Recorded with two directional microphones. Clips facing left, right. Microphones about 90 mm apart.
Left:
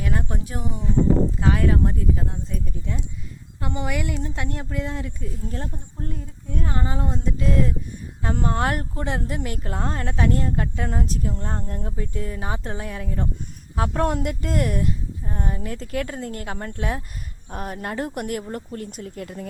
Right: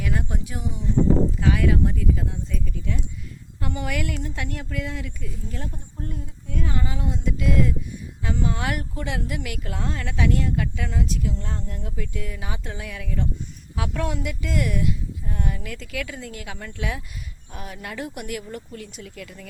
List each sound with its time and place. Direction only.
0.0 s speech: 35° left (ahead or behind)
8.2 s a woman's voice: 50° left (ahead or behind)